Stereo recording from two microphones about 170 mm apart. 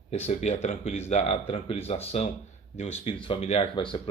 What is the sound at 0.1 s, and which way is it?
Speech, 40° left (ahead or behind).